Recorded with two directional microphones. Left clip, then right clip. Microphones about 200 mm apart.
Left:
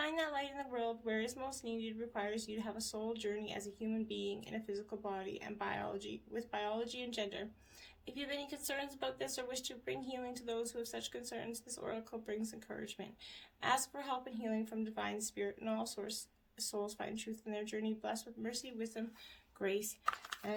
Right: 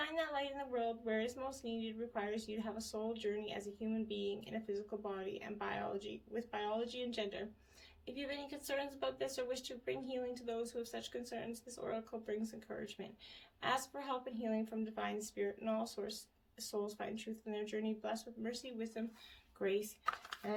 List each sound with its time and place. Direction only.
0.0 s speech: 35° left (ahead or behind)